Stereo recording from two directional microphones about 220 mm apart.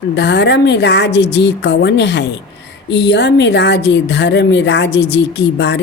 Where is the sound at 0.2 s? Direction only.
50° left (ahead or behind).